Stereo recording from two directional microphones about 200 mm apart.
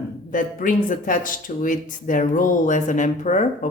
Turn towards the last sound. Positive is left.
turn(degrees=40)  # may be behind; listen again after turning